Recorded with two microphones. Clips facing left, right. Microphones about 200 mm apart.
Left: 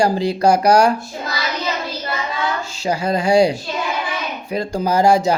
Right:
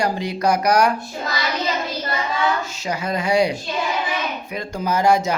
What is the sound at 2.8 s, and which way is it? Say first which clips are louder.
Speech: left 5 dB; 30° left (ahead or behind).